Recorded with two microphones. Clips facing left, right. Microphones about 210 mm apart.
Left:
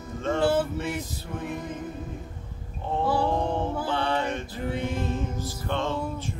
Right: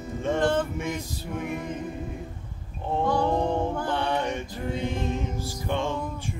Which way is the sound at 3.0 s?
5° left (ahead or behind).